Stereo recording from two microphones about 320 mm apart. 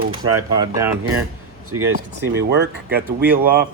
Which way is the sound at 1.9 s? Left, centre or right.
Right.